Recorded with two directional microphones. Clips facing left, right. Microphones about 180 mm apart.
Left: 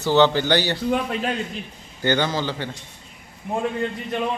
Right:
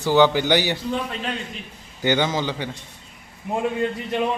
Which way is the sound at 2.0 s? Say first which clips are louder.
Right 1 dB; 15° right (ahead or behind).